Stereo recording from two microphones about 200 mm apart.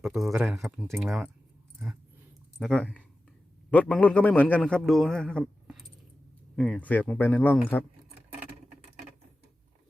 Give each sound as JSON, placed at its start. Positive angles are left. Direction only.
{"t": 0.0, "sound": "speech", "side_deg": 0}
{"t": 2.6, "sound": "a man's voice", "side_deg": 5}